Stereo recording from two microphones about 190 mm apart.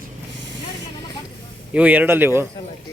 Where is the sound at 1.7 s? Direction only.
5° right (ahead or behind).